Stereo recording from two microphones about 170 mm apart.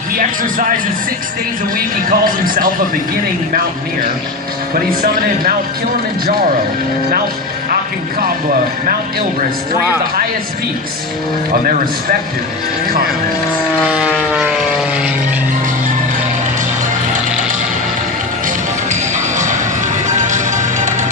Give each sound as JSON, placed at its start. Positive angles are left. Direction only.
{"t": 0.2, "sound": "speech", "side_deg": -50}
{"t": 2.0, "sound": "speech", "side_deg": -55}
{"t": 13.8, "sound": "vehicle", "side_deg": -5}
{"t": 18.4, "sound": "music", "side_deg": -45}